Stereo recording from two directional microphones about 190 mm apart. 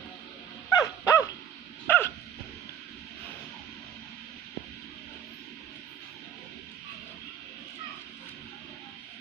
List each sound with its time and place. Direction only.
0.7 s dog: 15° left (ahead or behind)